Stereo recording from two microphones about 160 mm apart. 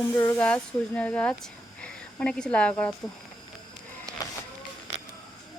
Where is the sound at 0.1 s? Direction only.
15° left (ahead or behind).